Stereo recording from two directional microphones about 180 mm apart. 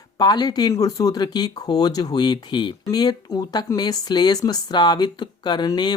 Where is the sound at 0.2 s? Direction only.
20° left (ahead or behind).